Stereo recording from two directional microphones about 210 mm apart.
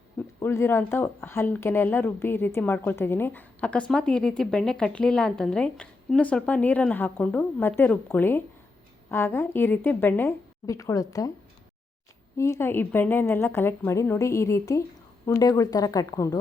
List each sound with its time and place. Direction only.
0.3 s speech: 15° left (ahead or behind)
12.4 s speech: 10° left (ahead or behind)